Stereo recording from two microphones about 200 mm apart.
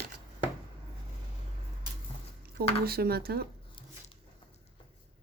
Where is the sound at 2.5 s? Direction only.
50° right (ahead or behind).